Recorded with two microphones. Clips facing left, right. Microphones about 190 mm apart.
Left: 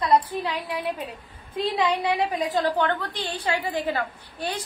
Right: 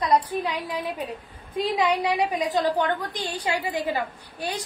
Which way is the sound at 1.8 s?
10° right (ahead or behind).